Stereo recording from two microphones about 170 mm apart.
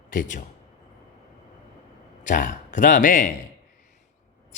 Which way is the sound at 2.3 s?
50° left (ahead or behind).